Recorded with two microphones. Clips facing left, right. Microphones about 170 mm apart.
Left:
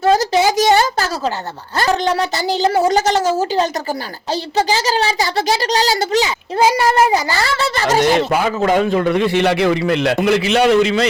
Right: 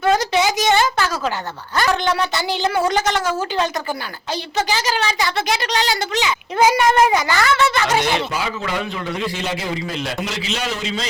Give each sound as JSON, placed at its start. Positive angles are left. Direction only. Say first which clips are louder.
{"t": 0.0, "sound": "a sound", "louder": "left 3 dB", "side_deg": 40}
{"t": 1.7, "sound": "a woman's voice", "louder": "left 2 dB", "side_deg": 35}
{"t": 8.3, "sound": "a man's voice", "louder": "left 9 dB", "side_deg": 50}